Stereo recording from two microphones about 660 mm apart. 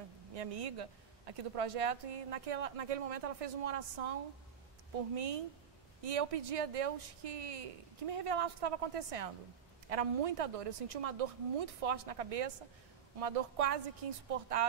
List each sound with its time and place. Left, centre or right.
0.3 s a woman's voice: right